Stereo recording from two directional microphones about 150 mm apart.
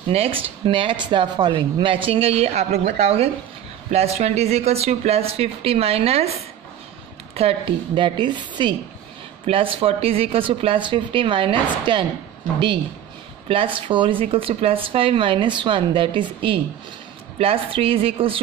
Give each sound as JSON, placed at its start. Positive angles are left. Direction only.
{"t": 0.1, "sound": "speech", "side_deg": -40}
{"t": 13.5, "sound": "speech", "side_deg": -35}